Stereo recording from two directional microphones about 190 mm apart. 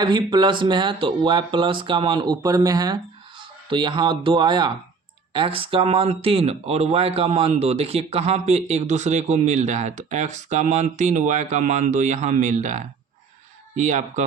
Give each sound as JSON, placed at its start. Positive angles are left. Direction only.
{"t": 0.0, "sound": "speech", "side_deg": -25}